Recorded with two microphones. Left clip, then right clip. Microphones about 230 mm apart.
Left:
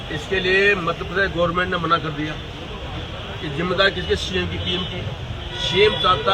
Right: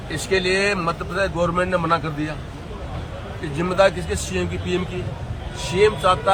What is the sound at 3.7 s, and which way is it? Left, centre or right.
Speech, right.